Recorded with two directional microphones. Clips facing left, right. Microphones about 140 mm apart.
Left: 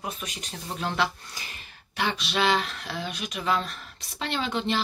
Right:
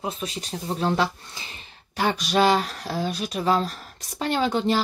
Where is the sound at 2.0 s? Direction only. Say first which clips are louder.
Right 6 dB; 40° right (ahead or behind).